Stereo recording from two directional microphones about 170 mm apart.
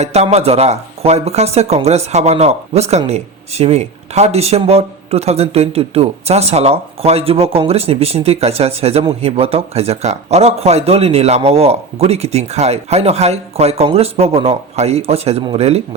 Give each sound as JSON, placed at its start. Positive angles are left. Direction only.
{"t": 0.0, "sound": "speech", "side_deg": -40}